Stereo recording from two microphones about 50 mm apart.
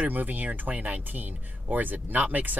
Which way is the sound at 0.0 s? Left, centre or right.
Right.